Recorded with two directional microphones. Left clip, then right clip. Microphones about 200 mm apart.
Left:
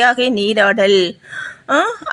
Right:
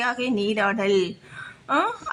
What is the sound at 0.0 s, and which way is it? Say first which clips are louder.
A woman's voice: left 11 dB; 20° left (ahead or behind).